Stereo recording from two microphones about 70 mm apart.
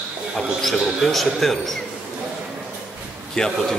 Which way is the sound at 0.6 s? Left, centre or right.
Centre.